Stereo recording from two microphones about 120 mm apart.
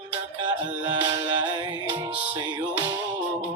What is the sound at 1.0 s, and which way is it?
Music, 35° right (ahead or behind).